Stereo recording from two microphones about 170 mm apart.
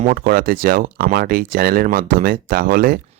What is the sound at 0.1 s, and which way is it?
Speech, 60° right (ahead or behind).